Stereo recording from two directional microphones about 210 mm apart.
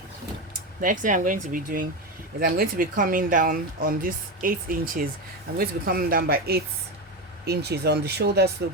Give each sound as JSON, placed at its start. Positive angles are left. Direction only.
{"t": 0.8, "sound": "speech", "side_deg": -40}